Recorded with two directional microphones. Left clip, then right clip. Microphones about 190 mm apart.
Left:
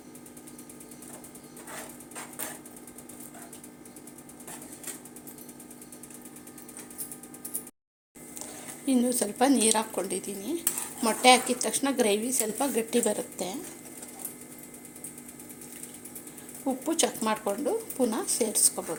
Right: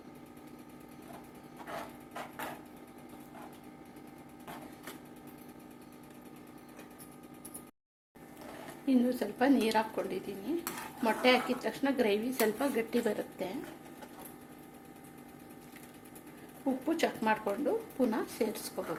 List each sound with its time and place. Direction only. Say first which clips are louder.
8.9 s a woman's voice: left 4 dB; 30° left (ahead or behind)
16.8 s a woman's voice: left 3 dB; 25° left (ahead or behind)